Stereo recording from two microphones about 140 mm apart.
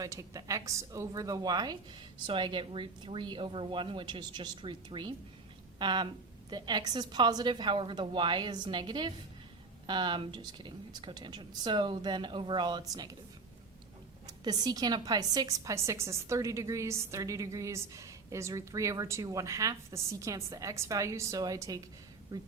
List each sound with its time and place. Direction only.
0.0 s a woman's voice: 25° right (ahead or behind)
14.3 s a woman's voice: 30° right (ahead or behind)